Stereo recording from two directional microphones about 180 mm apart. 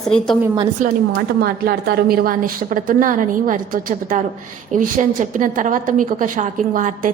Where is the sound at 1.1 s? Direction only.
60° right (ahead or behind).